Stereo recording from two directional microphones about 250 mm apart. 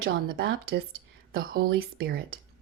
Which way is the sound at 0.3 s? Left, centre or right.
Right.